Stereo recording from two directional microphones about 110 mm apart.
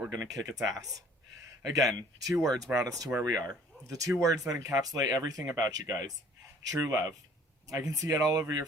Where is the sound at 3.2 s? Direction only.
30° right (ahead or behind).